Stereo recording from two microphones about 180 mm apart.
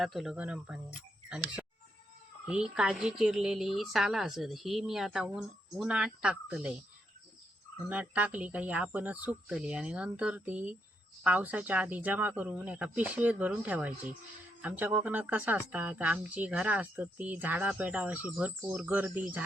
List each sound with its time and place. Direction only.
0.0 s a woman's voice: centre (ahead or behind)
7.9 s speech: 10° right (ahead or behind)